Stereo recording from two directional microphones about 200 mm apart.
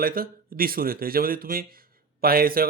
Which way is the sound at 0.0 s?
45° right (ahead or behind).